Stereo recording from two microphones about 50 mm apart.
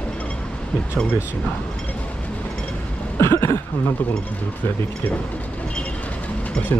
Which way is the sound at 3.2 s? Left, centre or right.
Left.